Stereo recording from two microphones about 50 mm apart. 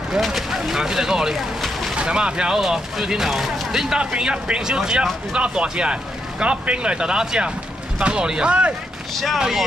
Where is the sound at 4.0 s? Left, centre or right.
Centre.